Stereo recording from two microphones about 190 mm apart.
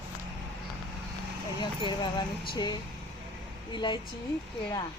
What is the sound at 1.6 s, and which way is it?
Speech, 25° left (ahead or behind).